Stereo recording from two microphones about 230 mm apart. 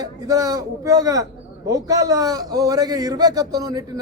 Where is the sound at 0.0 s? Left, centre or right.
Centre.